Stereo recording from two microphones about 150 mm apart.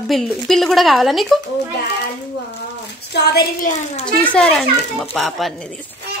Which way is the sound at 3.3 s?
90° left.